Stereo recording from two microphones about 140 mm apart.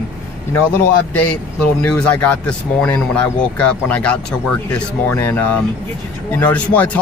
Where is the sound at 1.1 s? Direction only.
10° left (ahead or behind).